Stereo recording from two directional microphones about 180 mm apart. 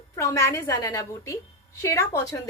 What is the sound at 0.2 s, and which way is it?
A woman's voice, 15° left (ahead or behind).